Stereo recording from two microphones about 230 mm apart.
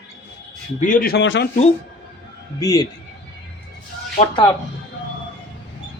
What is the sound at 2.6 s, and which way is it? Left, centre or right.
Speech, centre.